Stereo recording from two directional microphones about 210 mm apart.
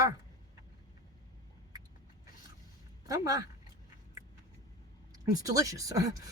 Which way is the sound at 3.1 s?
15° right (ahead or behind).